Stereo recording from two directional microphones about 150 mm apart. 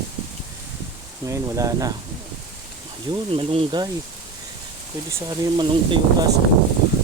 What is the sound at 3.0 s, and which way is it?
Speech, 35° right (ahead or behind).